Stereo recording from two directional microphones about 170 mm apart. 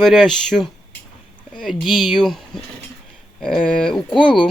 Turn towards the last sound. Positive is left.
turn(degrees=30)  # may be behind; listen again after turning